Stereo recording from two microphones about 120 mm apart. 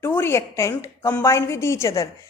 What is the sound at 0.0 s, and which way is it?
A woman's voice, 20° left (ahead or behind).